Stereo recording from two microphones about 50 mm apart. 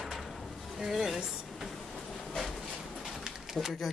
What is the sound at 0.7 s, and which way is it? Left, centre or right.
Train, centre.